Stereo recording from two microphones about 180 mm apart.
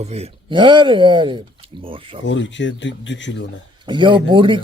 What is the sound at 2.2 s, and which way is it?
Speech, 90° left.